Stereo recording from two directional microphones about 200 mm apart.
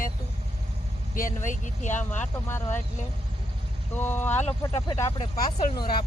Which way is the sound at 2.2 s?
10° left (ahead or behind).